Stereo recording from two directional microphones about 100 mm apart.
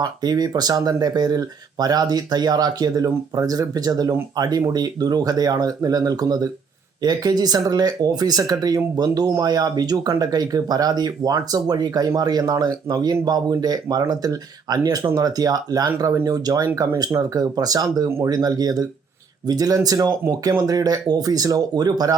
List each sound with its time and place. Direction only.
0.0 s speech: 40° right (ahead or behind)